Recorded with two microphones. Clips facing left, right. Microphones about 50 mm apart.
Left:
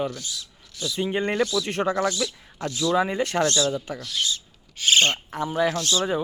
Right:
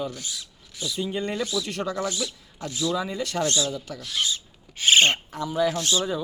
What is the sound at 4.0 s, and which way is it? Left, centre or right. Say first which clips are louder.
Rub: even; centre.